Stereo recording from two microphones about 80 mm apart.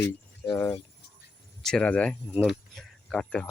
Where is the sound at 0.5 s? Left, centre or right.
Left.